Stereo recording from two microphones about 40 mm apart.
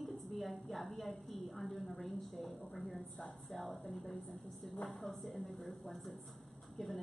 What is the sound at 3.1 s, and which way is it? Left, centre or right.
Speech, centre.